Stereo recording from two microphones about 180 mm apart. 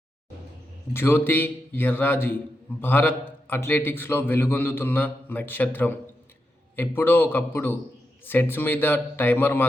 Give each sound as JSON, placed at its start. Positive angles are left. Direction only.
{"t": 0.9, "sound": "a man's voice", "side_deg": 15}